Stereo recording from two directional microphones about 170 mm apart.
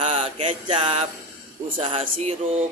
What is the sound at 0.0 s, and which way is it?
Mantra, 30° right (ahead or behind).